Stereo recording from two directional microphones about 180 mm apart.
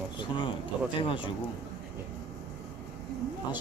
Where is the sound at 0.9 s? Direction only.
30° left (ahead or behind).